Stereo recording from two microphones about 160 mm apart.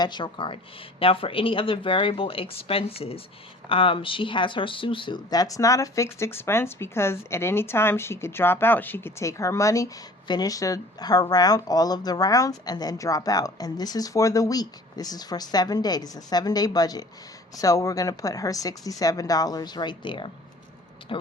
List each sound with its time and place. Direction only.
0.0 s speech: 30° left (ahead or behind)